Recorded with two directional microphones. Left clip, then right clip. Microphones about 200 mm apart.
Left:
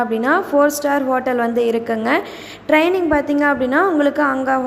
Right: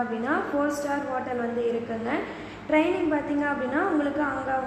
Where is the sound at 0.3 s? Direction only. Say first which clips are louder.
Left 12 dB; 40° left (ahead or behind).